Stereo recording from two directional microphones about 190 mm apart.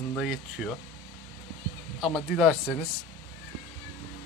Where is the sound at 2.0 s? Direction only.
Centre (ahead or behind).